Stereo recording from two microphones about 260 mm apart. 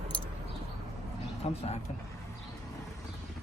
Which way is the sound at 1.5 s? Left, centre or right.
Left.